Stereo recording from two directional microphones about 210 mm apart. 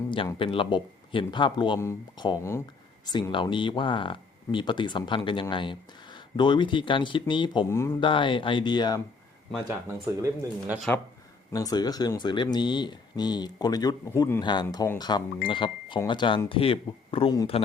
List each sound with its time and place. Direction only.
0.1 s speech: 25° left (ahead or behind)
8.0 s speech: 25° left (ahead or behind)
9.8 s speech: 10° right (ahead or behind)
11.5 s speech: 20° left (ahead or behind)